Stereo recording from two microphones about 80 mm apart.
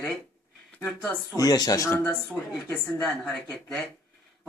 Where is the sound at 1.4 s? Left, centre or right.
Left.